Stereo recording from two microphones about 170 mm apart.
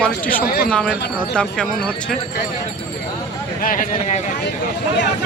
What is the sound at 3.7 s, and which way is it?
Speech, 55° left (ahead or behind).